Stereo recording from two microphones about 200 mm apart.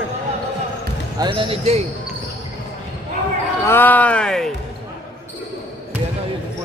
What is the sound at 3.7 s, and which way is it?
Speech, 10° left (ahead or behind).